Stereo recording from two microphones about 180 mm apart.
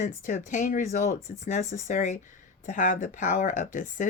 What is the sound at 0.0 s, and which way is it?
Speech, 45° left (ahead or behind).